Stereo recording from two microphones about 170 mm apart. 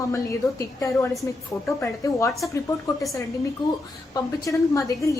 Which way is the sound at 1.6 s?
15° left (ahead or behind).